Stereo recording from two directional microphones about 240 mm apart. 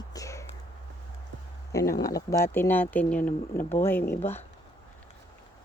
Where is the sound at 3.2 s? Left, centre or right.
Left.